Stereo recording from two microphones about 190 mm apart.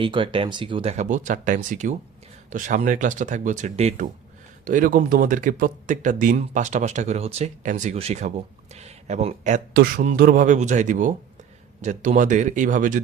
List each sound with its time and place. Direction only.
0.0 s speech: 25° right (ahead or behind)
9.7 s speech: 55° right (ahead or behind)